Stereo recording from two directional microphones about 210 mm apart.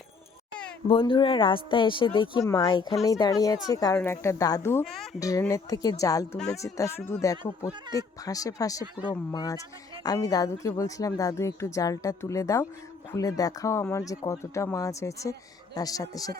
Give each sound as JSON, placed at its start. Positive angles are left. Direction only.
{"t": 0.9, "sound": "speech", "side_deg": 25}